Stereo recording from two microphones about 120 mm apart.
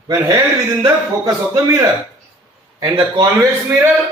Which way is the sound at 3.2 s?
25° right (ahead or behind).